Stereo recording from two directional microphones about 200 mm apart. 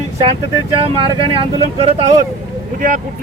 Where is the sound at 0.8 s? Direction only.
30° right (ahead or behind).